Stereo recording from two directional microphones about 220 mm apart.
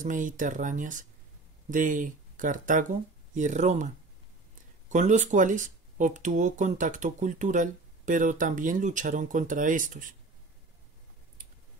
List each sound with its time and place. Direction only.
0.0 s speech: 35° right (ahead or behind)